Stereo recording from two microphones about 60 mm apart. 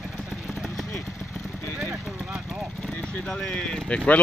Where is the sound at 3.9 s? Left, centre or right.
Left.